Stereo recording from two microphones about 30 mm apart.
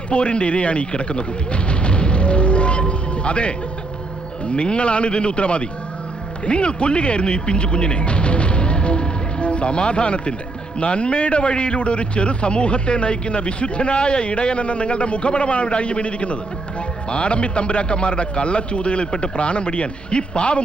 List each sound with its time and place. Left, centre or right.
0.1 s a man's voice: left